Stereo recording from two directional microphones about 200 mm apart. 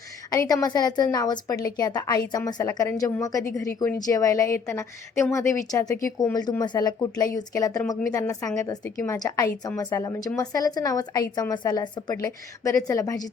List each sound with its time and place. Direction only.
0.3 s a woman's voice: 20° left (ahead or behind)